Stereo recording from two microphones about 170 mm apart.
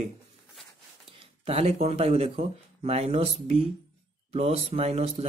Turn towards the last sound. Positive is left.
turn(degrees=-40)  # may be behind; listen again after turning